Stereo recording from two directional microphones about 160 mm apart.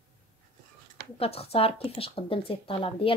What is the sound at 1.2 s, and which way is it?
A woman's voice, 40° left (ahead or behind).